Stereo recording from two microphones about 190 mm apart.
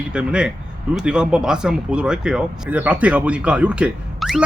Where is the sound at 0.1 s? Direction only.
5° right (ahead or behind).